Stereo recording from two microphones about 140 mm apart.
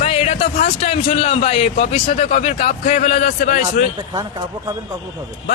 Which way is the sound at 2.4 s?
60° left (ahead or behind).